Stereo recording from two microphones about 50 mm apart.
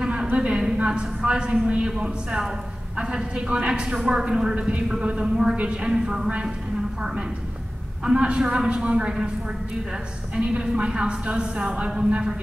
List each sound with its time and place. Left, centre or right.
0.0 s a sound: centre
0.8 s a man's voice: centre
5.6 s a man's voice: right
10.3 s speech: centre